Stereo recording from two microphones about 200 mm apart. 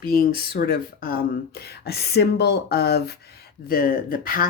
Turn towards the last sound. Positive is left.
turn(degrees=45)  # may be behind; listen again after turning